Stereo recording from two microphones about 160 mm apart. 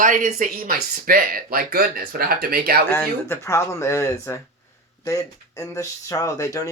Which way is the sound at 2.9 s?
15° left (ahead or behind).